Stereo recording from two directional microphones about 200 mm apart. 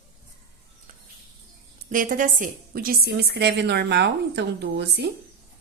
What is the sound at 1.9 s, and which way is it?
A woman's voice, 40° right (ahead or behind).